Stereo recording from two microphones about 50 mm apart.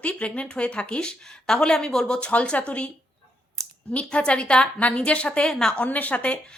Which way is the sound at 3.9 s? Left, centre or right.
Left.